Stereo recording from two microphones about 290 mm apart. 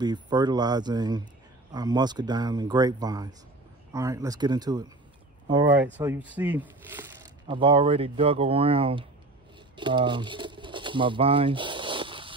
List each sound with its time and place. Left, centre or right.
0.0 s speech: centre
5.9 s speech: centre